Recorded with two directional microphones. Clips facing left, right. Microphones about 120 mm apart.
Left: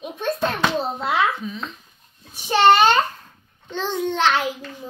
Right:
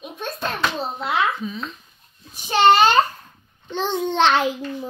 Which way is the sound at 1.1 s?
5° right (ahead or behind).